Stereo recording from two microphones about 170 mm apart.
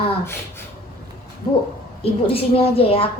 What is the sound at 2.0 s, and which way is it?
A woman's voice, 35° left (ahead or behind).